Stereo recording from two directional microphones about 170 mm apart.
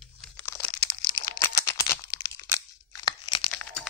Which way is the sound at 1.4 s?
15° left (ahead or behind).